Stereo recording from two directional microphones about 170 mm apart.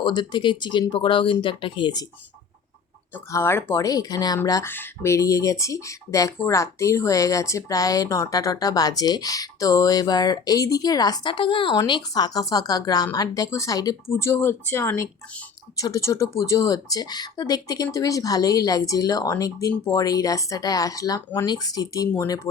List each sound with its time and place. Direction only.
0.0 s speech: 25° left (ahead or behind)
3.3 s speech: 15° left (ahead or behind)